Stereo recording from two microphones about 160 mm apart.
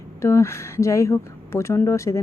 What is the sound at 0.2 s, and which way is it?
Speech, 15° left (ahead or behind).